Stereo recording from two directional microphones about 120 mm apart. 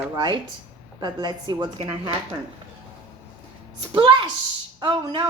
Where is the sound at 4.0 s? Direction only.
40° right (ahead or behind).